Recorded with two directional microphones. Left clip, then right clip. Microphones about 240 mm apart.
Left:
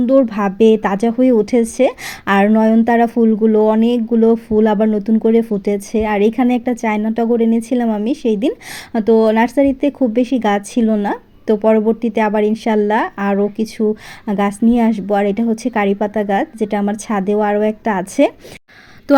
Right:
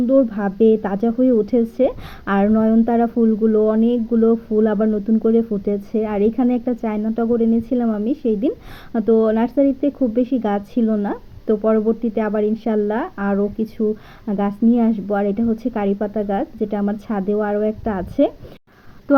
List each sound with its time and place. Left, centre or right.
0.1 s a woman's voice: left